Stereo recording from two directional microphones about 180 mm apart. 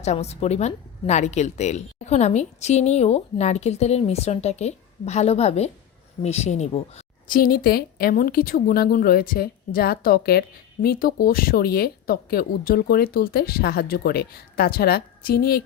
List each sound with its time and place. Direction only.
0.0 s a woman's voice: 35° left (ahead or behind)
7.3 s speech: 50° left (ahead or behind)